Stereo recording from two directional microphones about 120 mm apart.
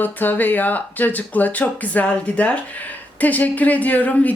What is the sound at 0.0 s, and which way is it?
Speech, 15° left (ahead or behind).